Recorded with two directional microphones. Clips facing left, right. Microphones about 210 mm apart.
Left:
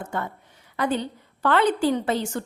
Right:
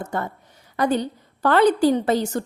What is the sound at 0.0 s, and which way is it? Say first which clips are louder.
A woman's voice: right 3 dB; 40° right (ahead or behind).